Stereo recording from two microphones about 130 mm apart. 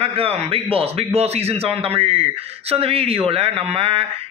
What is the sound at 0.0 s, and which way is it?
Speech, 50° right (ahead or behind).